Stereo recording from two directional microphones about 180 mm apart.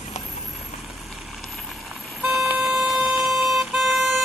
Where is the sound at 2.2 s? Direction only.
Centre (ahead or behind).